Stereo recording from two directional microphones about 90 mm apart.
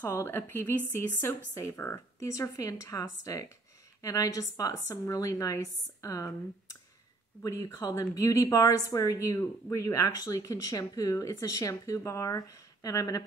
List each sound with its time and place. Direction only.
0.1 s a woman's voice: 30° left (ahead or behind)